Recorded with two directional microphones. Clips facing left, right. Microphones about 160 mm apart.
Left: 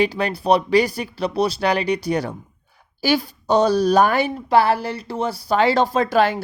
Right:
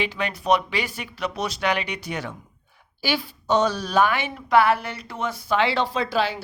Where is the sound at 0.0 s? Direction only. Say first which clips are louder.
Left 6 dB; 35° left (ahead or behind).